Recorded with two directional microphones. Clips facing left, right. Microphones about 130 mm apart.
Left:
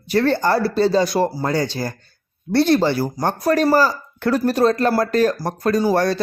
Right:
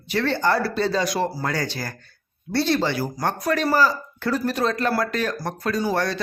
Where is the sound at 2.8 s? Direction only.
35° left (ahead or behind).